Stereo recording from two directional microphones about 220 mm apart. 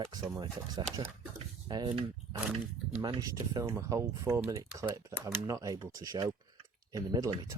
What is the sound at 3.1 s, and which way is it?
Speech, 15° right (ahead or behind).